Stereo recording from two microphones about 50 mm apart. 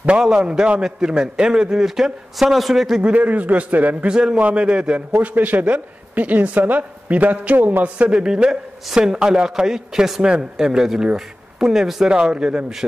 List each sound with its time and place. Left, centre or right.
0.2 s a man's voice: centre
3.0 s speech: right
4.1 s a man's voice: centre
5.2 s speech: right
8.0 s a man's voice: centre